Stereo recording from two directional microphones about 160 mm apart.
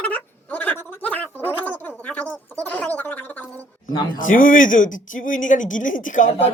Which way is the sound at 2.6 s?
10° left (ahead or behind).